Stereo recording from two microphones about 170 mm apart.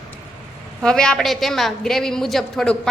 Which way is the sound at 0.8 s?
5° left (ahead or behind).